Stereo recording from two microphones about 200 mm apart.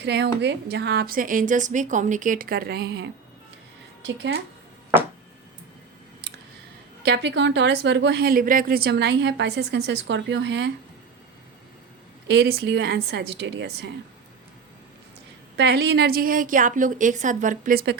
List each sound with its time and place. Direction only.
0.0 s a woman's voice: 60° right (ahead or behind)
7.0 s a woman's voice: 60° right (ahead or behind)
12.3 s a woman's voice: 55° right (ahead or behind)
15.5 s a woman's voice: 55° right (ahead or behind)